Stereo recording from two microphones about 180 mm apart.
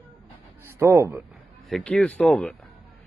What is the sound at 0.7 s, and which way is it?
Speech, 15° right (ahead or behind).